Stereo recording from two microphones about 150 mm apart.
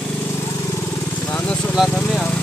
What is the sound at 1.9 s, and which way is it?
Speech, 5° left (ahead or behind).